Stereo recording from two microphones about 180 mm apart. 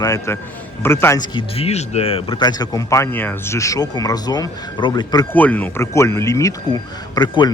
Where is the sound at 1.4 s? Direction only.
35° left (ahead or behind).